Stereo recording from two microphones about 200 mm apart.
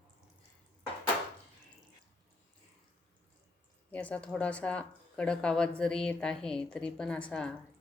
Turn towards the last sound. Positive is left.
turn(degrees=5)  # may be behind; listen again after turning